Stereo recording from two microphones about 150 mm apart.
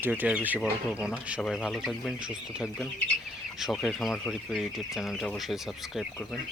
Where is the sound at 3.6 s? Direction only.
Centre (ahead or behind).